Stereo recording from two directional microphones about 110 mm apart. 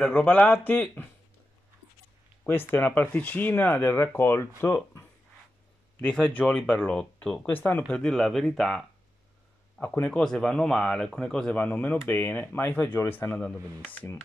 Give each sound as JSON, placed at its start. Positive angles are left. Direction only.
{"t": 0.0, "sound": "speech", "side_deg": 15}
{"t": 2.4, "sound": "speech", "side_deg": 20}
{"t": 9.8, "sound": "speech", "side_deg": 20}
{"t": 10.0, "sound": "speech", "side_deg": 5}